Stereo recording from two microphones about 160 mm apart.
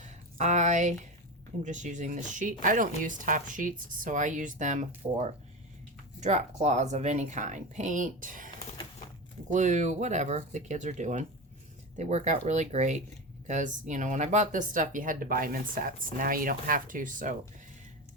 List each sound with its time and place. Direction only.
0.0 s a sound: 50° right (ahead or behind)
1.6 s speech: 50° right (ahead or behind)
6.1 s speech: 45° right (ahead or behind)